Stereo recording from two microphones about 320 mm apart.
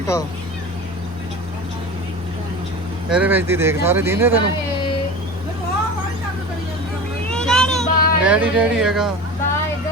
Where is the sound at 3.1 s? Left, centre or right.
Centre.